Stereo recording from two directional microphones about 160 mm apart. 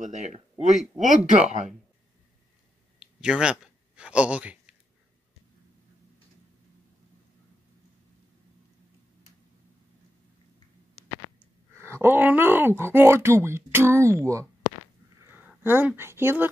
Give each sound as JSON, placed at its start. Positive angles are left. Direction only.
{"t": 0.0, "sound": "speech", "side_deg": -45}
{"t": 3.0, "sound": "a sound", "side_deg": -5}
{"t": 11.7, "sound": "speech", "side_deg": -15}